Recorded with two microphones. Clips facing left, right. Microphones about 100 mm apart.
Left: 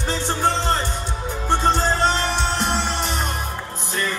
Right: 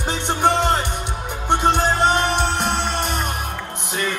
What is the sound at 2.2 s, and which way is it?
Music, 55° right (ahead or behind).